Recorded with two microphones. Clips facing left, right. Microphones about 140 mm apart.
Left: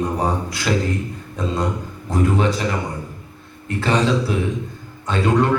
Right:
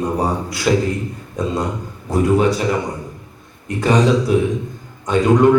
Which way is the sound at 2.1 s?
10° right (ahead or behind).